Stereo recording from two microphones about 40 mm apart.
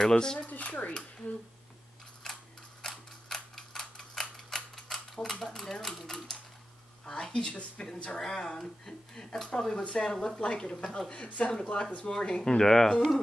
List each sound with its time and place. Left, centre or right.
0.1 s speech: centre
0.5 s speech: left
2.2 s camera: centre
2.8 s typewriter: centre
7.1 s speech: centre
8.4 s speech: centre
10.1 s speech: centre
11.2 s speech: left; by 12.9 s centre